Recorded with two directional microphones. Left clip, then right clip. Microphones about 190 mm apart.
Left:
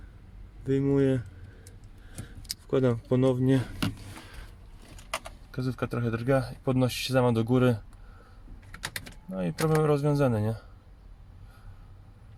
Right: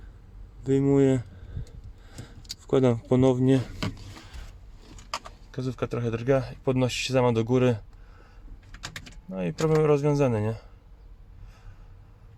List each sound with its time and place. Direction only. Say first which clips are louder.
0.6 s speech: right 4 dB; 5° right (ahead or behind)
2.2 s speech: left 1 dB; 10° right (ahead or behind)
5.5 s speech: right 2 dB; centre (ahead or behind)
9.3 s speech: right 3 dB; centre (ahead or behind)